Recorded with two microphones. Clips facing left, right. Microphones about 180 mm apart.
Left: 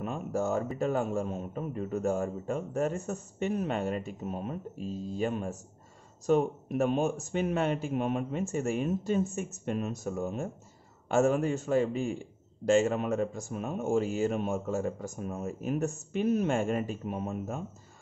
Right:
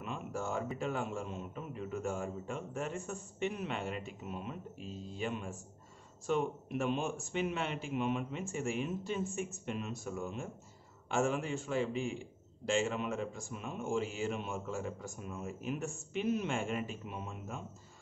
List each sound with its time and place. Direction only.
0.0 s a man's voice: 40° left (ahead or behind)